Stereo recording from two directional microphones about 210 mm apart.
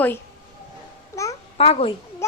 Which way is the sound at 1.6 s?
30° left (ahead or behind).